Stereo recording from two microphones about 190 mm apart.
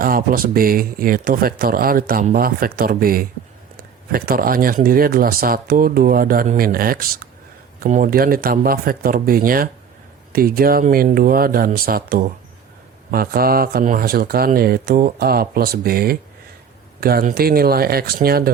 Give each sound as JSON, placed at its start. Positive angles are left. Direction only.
{"t": 0.0, "sound": "speech", "side_deg": -50}